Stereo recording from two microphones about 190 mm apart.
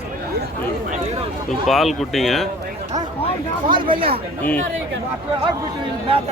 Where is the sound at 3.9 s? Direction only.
30° right (ahead or behind).